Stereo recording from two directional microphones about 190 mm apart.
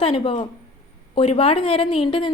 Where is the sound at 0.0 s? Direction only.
30° left (ahead or behind).